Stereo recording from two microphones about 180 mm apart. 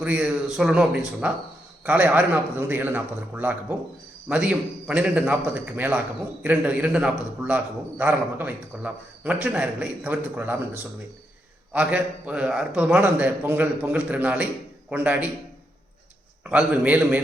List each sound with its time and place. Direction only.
0.0 s a man's voice: 5° right (ahead or behind)
11.7 s a man's voice: 5° right (ahead or behind)
16.4 s a man's voice: 5° right (ahead or behind)